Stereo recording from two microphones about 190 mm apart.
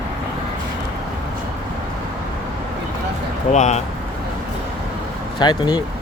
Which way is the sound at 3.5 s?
40° left (ahead or behind).